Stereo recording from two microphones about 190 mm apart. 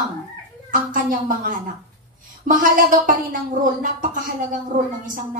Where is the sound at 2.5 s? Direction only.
45° right (ahead or behind).